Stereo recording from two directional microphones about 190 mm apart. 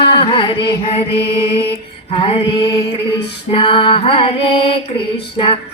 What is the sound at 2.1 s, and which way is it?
Female singing, 30° left (ahead or behind).